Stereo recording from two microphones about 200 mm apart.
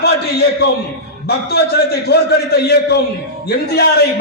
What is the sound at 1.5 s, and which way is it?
A man's voice, 55° left (ahead or behind).